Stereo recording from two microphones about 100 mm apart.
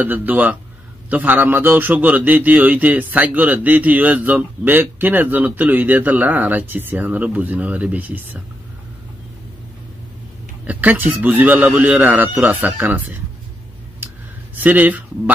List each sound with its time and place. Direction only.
0.0 s a man's voice: 15° right (ahead or behind)
10.6 s a man's voice: 15° right (ahead or behind)
13.9 s a sound: 20° right (ahead or behind)